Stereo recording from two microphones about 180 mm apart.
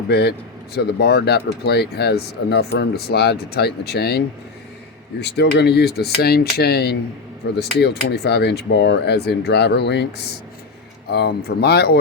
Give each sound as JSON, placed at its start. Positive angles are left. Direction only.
{"t": 0.1, "sound": "speech", "side_deg": 65}
{"t": 5.2, "sound": "speech", "side_deg": 70}